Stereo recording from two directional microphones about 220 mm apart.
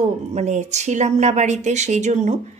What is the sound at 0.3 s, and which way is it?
A woman's voice, 30° right (ahead or behind).